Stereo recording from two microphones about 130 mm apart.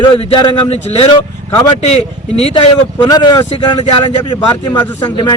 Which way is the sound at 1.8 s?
55° left (ahead or behind).